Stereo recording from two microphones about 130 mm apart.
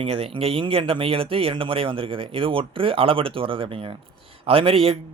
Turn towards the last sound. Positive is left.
turn(degrees=-45)  # may be behind; listen again after turning